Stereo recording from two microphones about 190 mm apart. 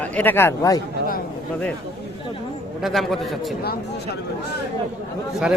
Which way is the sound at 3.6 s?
55° left (ahead or behind).